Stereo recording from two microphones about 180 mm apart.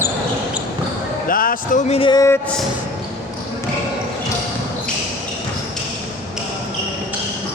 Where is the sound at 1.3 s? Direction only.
50° left (ahead or behind); by 2.4 s 20° left (ahead or behind).